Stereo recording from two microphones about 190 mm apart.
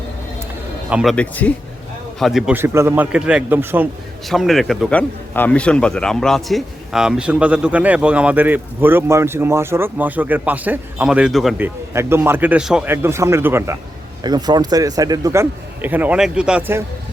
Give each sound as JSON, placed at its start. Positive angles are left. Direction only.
{"t": 0.9, "sound": "speech", "side_deg": -5}
{"t": 1.1, "sound": "a man's voice", "side_deg": 5}
{"t": 4.3, "sound": "a man's voice", "side_deg": 0}